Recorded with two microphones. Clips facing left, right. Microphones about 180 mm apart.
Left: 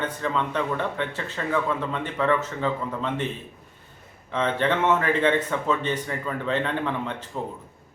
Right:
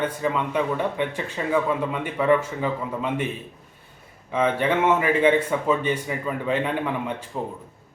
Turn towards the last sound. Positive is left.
turn(degrees=-10)  # may be behind; listen again after turning